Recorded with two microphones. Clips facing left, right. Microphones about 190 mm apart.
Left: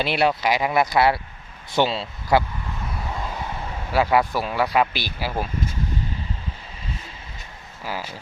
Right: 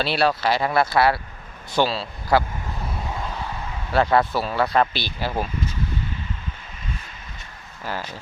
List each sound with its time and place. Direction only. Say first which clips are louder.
0.0 s a man's voice: even; 20° left (ahead or behind)
3.9 s speech: right 1 dB; 10° left (ahead or behind)
7.9 s speech: even; 10° left (ahead or behind)